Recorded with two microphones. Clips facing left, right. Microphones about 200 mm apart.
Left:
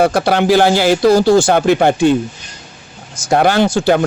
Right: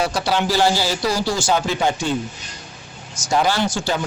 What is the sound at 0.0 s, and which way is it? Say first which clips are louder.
Speech: left 8 dB; 55° left (ahead or behind).